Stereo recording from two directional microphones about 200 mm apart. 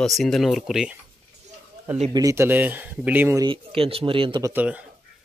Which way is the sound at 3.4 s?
25° right (ahead or behind).